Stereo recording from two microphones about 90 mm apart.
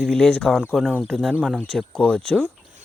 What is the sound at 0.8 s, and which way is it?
Speech, 10° right (ahead or behind).